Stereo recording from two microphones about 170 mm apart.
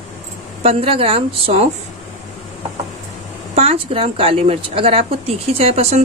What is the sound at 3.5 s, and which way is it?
Speech, 35° right (ahead or behind).